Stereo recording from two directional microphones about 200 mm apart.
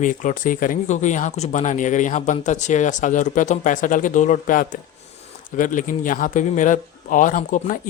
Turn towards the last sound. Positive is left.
turn(degrees=40)  # may be behind; listen again after turning